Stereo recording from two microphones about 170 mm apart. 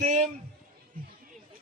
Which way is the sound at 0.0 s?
45° right (ahead or behind).